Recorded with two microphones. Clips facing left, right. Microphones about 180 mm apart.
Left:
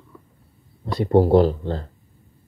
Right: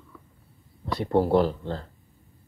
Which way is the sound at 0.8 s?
15° left (ahead or behind).